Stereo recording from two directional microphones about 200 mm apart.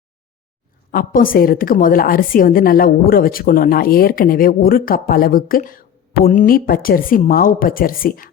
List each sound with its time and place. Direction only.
0.9 s a woman's voice: 45° left (ahead or behind)